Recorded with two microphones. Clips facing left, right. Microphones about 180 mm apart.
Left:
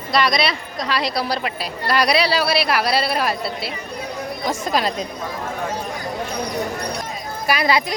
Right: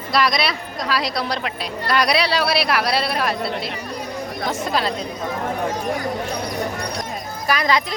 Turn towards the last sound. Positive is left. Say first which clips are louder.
# left 1 dB
turn(degrees=10)  # may be behind; listen again after turning